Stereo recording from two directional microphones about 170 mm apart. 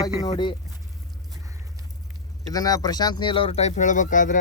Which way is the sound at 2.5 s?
20° left (ahead or behind).